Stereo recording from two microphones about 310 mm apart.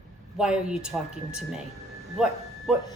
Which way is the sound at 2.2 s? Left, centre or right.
Centre.